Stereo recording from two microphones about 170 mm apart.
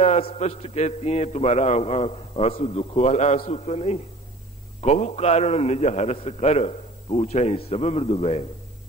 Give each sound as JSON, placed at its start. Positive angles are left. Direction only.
{"t": 0.0, "sound": "a man's voice", "side_deg": 35}